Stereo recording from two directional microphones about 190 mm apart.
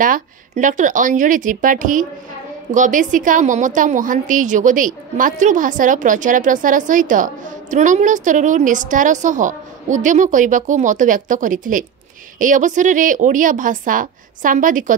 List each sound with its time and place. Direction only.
0.0 s a woman's voice: 45° right (ahead or behind)